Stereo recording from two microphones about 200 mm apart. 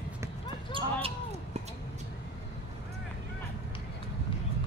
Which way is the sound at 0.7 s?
30° right (ahead or behind).